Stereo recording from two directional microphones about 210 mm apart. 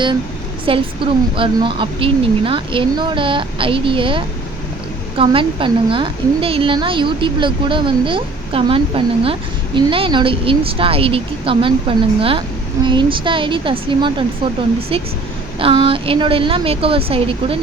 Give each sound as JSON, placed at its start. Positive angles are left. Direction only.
{"t": 0.6, "sound": "a woman's voice", "side_deg": -25}